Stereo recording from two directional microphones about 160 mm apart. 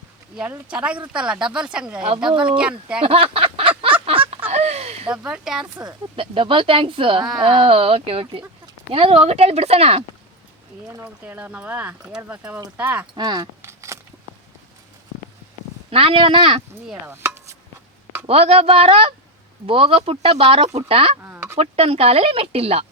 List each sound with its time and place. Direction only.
0.3 s speech: 10° right (ahead or behind)
3.0 s a sound: 35° right (ahead or behind)
5.0 s speech: 5° right (ahead or behind)
5.7 s speech: 30° right (ahead or behind)
10.8 s speech: 20° right (ahead or behind)
13.1 s a sound: 25° right (ahead or behind)
15.9 s speech: 35° right (ahead or behind)
16.9 s speech: 15° right (ahead or behind)
18.3 s speech: 40° right (ahead or behind)
21.2 s a sound: 15° right (ahead or behind)
21.6 s speech: 40° right (ahead or behind)